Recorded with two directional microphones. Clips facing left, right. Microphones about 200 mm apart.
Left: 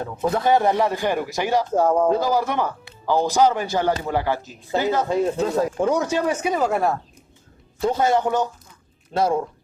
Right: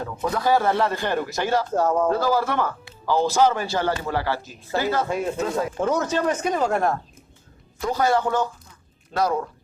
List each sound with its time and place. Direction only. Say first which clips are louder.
0.2 s a man's voice: left 2 dB; 25° left (ahead or behind)
5.4 s speech: left 3 dB; 35° left (ahead or behind)
5.8 s a man's voice: right 1 dB; 10° left (ahead or behind)
7.8 s a man's voice: left 2 dB; 25° left (ahead or behind)